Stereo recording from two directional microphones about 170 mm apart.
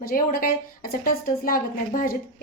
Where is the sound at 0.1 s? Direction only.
55° left (ahead or behind).